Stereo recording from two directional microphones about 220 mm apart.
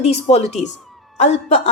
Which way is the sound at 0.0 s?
30° left (ahead or behind).